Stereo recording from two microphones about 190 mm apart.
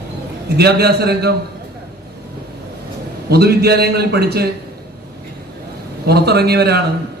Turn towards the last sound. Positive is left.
turn(degrees=-55)  # may be behind; listen again after turning